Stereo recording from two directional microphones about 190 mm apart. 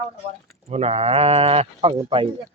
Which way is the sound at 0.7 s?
30° right (ahead or behind).